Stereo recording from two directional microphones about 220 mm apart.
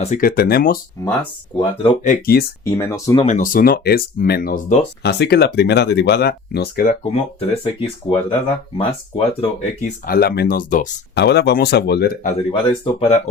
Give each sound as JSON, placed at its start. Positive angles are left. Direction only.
{"t": 0.0, "sound": "speech", "side_deg": 40}
{"t": 1.0, "sound": "speech", "side_deg": 15}
{"t": 2.0, "sound": "speech", "side_deg": 45}
{"t": 2.7, "sound": "speech", "side_deg": 15}
{"t": 3.2, "sound": "speech", "side_deg": 35}
{"t": 7.0, "sound": "speech", "side_deg": 25}
{"t": 8.8, "sound": "speech", "side_deg": 25}
{"t": 10.1, "sound": "speech", "side_deg": 45}
{"t": 11.1, "sound": "speech", "side_deg": 50}
{"t": 12.5, "sound": "speech", "side_deg": 25}